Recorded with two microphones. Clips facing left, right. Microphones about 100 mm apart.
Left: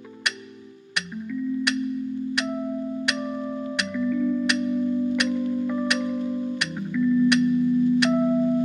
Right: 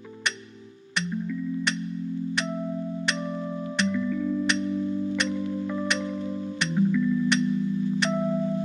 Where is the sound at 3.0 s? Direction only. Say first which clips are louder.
Left 2 dB; 10° left (ahead or behind).